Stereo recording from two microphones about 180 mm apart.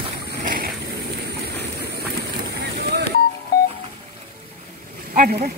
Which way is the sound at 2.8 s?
65° right (ahead or behind).